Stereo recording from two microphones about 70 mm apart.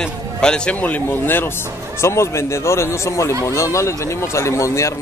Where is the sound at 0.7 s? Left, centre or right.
Left.